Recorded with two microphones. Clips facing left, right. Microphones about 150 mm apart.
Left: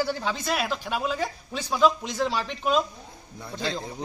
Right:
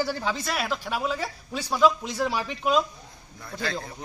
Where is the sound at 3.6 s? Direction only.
15° left (ahead or behind).